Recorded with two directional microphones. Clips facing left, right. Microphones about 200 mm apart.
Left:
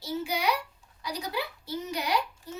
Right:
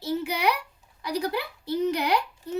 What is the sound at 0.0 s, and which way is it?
Speech, 60° right (ahead or behind).